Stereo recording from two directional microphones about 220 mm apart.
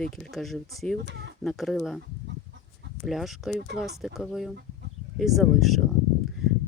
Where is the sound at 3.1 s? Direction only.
Centre (ahead or behind).